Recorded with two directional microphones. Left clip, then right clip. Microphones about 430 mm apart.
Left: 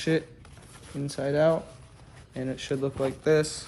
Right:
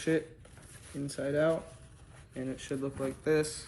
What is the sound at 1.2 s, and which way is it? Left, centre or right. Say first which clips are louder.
A man's voice: left 6 dB; centre.